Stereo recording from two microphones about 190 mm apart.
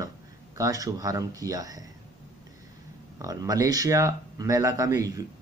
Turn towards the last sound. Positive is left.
turn(degrees=-20)  # may be behind; listen again after turning